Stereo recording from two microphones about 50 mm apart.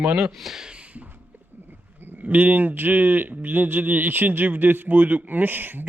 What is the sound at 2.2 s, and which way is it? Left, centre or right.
Speech, right.